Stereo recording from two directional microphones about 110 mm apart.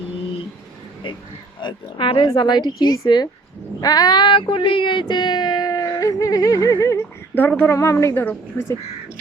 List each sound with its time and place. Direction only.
1.6 s speech: 45° left (ahead or behind)
3.8 s child singing: 35° left (ahead or behind); by 8.7 s 20° left (ahead or behind)